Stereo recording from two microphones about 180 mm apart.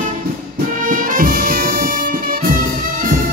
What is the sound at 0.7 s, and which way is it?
Music, 50° right (ahead or behind).